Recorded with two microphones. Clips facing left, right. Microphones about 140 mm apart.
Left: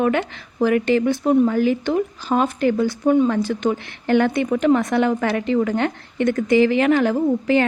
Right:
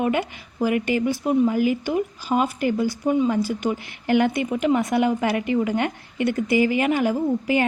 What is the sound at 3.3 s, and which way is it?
Speech, 10° right (ahead or behind).